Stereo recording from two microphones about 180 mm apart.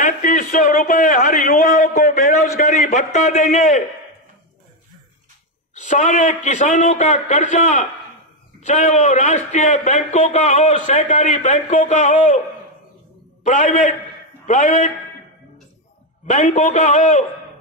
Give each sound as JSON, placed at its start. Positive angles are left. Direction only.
{"t": 0.0, "sound": "a man's voice", "side_deg": 45}
{"t": 5.8, "sound": "a man's voice", "side_deg": 40}
{"t": 13.4, "sound": "a man's voice", "side_deg": 45}
{"t": 16.3, "sound": "a man's voice", "side_deg": 45}